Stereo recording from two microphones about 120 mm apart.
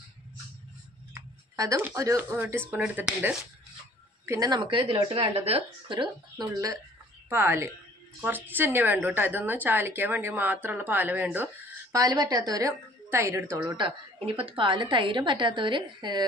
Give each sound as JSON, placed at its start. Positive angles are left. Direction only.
{"t": 1.1, "sound": "a sound", "side_deg": -30}
{"t": 2.0, "sound": "a woman's voice", "side_deg": -20}
{"t": 4.3, "sound": "a woman's voice", "side_deg": -35}
{"t": 7.2, "sound": "a woman's voice", "side_deg": -20}
{"t": 11.9, "sound": "a woman's voice", "side_deg": -30}
{"t": 13.7, "sound": "a woman's voice", "side_deg": -45}